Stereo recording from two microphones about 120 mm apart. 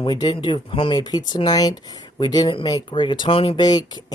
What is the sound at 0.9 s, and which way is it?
Speech, 35° left (ahead or behind).